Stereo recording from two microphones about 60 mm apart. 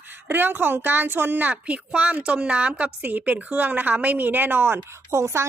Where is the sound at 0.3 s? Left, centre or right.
Right.